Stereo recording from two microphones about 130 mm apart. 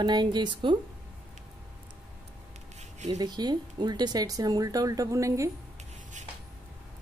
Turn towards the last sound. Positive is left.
turn(degrees=-25)  # may be behind; listen again after turning